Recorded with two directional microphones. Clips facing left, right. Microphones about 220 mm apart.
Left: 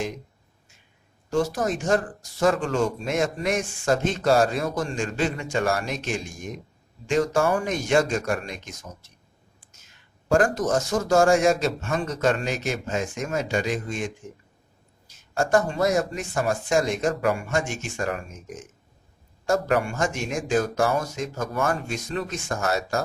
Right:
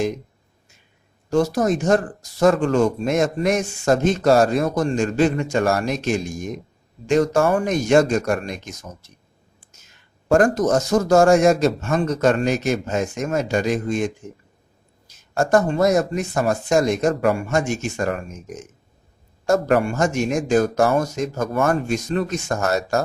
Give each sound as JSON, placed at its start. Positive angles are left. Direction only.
{"t": 1.3, "sound": "speech", "side_deg": -40}
{"t": 10.3, "sound": "speech", "side_deg": -40}